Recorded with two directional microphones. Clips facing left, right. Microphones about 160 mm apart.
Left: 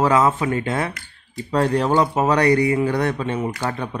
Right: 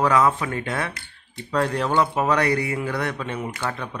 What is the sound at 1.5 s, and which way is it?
Speech, 35° left (ahead or behind).